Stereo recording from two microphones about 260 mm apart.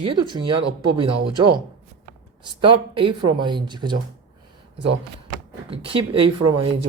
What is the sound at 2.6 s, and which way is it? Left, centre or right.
Speech, centre.